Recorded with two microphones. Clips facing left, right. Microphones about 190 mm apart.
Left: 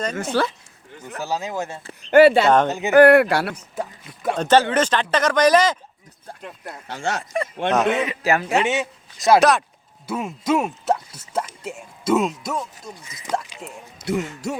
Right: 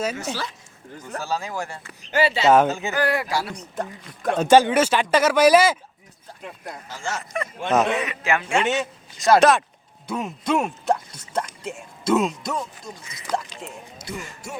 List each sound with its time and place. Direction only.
0.2 s speech: 55° left (ahead or behind)
1.2 s speech: 20° left (ahead or behind)
2.0 s speech: 55° left (ahead or behind)
2.6 s speech: 20° left (ahead or behind)
2.9 s speech: 60° left (ahead or behind)
3.5 s speech: 5° left (ahead or behind)
4.4 s speech: 10° right (ahead or behind)
6.8 s speech: 65° left (ahead or behind)
7.7 s speech: centre (ahead or behind)
7.9 s a man's voice: 30° left (ahead or behind)
8.6 s speech: 10° left (ahead or behind)
14.0 s speech: 70° left (ahead or behind)